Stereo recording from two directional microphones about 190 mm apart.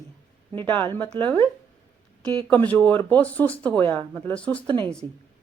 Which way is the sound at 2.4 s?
10° left (ahead or behind).